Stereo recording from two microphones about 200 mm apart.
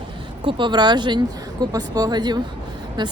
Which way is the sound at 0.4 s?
20° right (ahead or behind).